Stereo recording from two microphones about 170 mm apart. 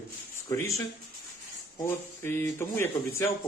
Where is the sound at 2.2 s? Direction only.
15° left (ahead or behind).